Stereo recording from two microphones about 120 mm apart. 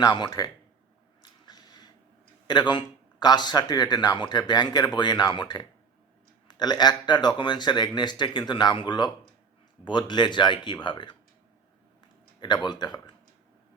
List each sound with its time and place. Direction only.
0.0 s speech: 35° left (ahead or behind)
1.2 s a sound: 35° left (ahead or behind)
2.5 s speech: 40° left (ahead or behind)
12.6 s speech: 35° left (ahead or behind)